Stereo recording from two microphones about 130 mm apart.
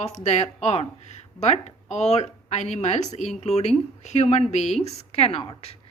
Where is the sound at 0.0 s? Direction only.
60° left (ahead or behind).